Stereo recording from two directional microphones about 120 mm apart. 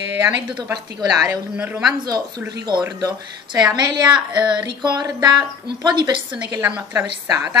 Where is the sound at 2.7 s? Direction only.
40° right (ahead or behind).